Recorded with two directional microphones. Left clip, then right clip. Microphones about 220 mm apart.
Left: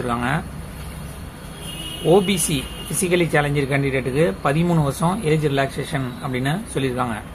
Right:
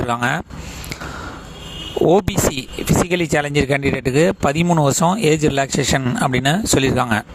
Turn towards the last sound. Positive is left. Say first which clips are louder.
# right 7 dB
turn(degrees=-50)  # may be behind; listen again after turning